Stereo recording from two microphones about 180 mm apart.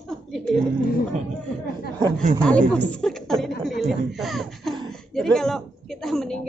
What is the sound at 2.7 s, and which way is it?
A woman's voice, 5° left (ahead or behind).